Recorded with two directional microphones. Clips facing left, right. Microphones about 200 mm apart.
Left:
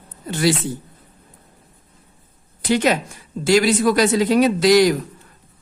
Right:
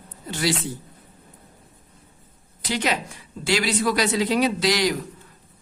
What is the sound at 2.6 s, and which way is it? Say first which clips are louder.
A woman's voice: left 7 dB; 50° left (ahead or behind).